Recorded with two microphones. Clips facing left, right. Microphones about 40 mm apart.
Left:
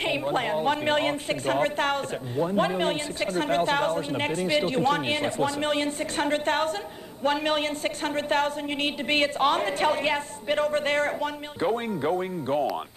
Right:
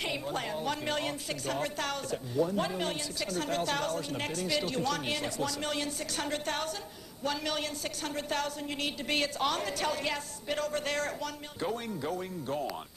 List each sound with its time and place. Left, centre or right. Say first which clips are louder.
0.0 s a woman's voice: left 8 dB; left